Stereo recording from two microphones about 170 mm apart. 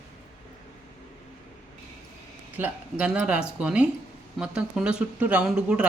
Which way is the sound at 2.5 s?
10° right (ahead or behind).